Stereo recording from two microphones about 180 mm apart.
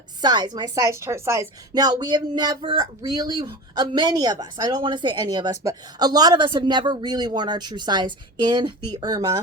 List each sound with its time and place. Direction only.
0.2 s a woman's voice: 25° right (ahead or behind)